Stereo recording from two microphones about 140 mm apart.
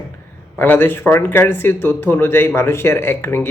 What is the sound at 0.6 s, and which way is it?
Speech, 15° left (ahead or behind).